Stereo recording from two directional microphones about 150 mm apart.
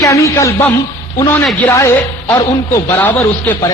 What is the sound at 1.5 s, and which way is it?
A man's voice, 15° left (ahead or behind).